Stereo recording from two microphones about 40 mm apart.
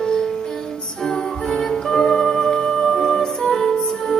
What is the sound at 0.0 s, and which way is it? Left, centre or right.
Music, centre.